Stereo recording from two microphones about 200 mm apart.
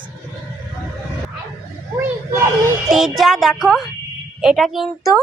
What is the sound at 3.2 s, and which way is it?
Speech, centre (ahead or behind).